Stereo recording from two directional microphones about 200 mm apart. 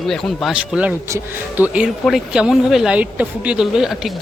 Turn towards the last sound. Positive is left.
turn(degrees=0)  # may be behind; listen again after turning